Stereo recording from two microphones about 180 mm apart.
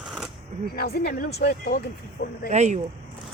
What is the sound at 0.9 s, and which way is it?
Speech, 60° left (ahead or behind).